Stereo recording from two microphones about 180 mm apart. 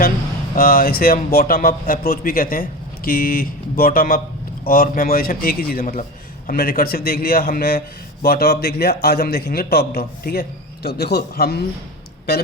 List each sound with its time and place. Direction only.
0.5 s speech: 55° left (ahead or behind)